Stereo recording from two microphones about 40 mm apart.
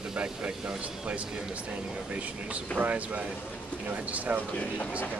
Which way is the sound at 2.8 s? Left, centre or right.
Right.